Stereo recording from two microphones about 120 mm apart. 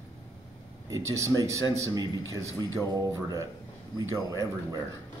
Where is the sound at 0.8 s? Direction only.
25° right (ahead or behind).